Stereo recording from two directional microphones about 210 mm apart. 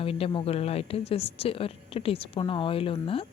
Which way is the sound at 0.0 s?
25° left (ahead or behind).